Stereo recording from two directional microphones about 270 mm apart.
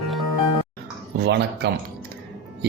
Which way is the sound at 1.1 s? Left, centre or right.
Right.